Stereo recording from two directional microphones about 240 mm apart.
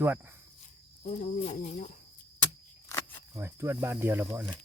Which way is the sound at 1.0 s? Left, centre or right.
Left.